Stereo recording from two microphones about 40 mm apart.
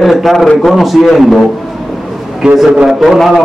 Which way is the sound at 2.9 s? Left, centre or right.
Centre.